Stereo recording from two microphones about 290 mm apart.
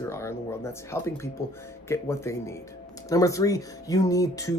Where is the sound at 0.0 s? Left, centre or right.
Centre.